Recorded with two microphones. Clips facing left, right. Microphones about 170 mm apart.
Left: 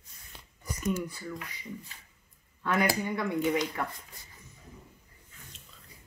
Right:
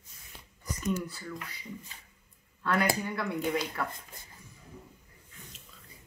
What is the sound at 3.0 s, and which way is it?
Speech, 15° left (ahead or behind).